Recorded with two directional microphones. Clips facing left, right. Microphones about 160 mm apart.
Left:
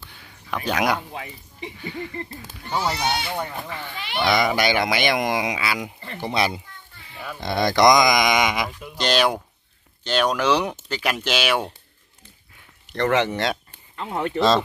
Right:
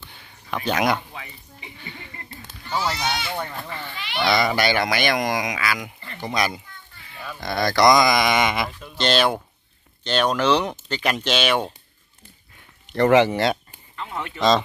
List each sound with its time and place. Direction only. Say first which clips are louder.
0.5 s speech: right 1 dB; 5° left (ahead or behind)
1.1 s speech: left 4 dB; 35° left (ahead or behind)
2.7 s speech: left 1 dB; 15° left (ahead or behind)
4.3 s speech: even; 15° left (ahead or behind)
12.9 s speech: right 5 dB; 10° right (ahead or behind)
13.9 s speech: left 6 dB; 40° left (ahead or behind)